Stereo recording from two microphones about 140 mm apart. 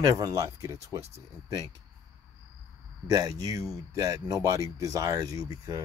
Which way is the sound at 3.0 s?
25° right (ahead or behind).